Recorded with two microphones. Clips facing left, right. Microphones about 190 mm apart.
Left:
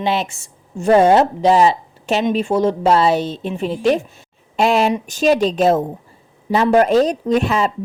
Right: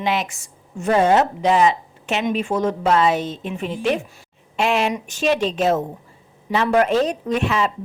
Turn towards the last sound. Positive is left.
turn(degrees=35)  # may be behind; listen again after turning